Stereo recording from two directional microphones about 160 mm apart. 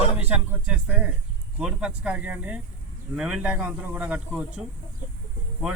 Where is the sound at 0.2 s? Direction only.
10° right (ahead or behind).